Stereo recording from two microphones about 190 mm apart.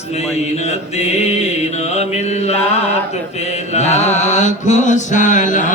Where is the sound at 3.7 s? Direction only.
35° left (ahead or behind).